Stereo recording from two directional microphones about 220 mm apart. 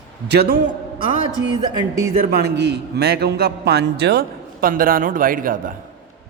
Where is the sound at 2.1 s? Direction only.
45° right (ahead or behind).